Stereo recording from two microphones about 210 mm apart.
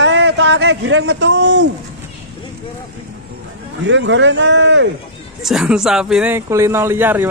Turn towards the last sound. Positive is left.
turn(degrees=-10)  # may be behind; listen again after turning